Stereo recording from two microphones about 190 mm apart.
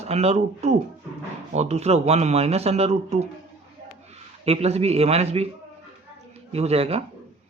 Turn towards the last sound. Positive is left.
turn(degrees=-30)  # may be behind; listen again after turning